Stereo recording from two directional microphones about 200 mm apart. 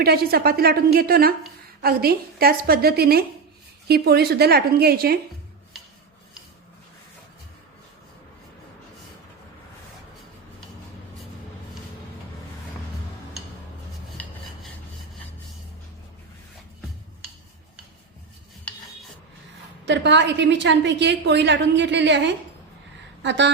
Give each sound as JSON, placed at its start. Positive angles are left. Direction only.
{"t": 0.0, "sound": "a woman's voice", "side_deg": -50}
{"t": 14.2, "sound": "filing", "side_deg": 5}
{"t": 19.8, "sound": "a woman's voice", "side_deg": -60}